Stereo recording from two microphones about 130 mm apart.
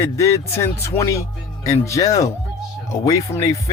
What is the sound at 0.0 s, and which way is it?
Speech, 25° left (ahead or behind).